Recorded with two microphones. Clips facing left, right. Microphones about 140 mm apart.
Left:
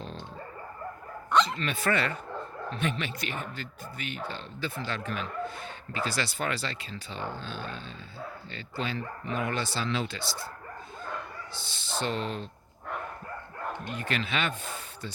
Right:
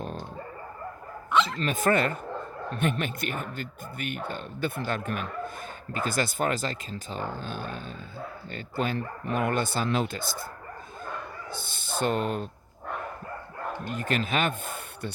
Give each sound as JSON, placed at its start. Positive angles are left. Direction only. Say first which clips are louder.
{"t": 1.5, "sound": "speech", "louder": "right 4 dB", "side_deg": -40}
{"t": 11.5, "sound": "speech", "louder": "right 2 dB", "side_deg": -50}
{"t": 13.9, "sound": "speech", "louder": "right 5 dB", "side_deg": -45}